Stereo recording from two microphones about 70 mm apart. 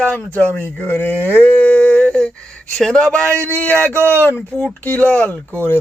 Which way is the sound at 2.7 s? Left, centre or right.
Centre.